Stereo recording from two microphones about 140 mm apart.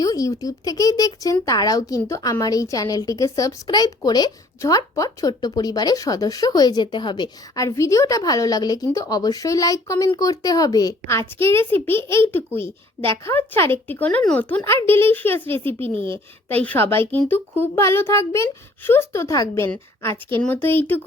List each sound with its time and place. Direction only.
0.0 s a child's voice: 25° left (ahead or behind)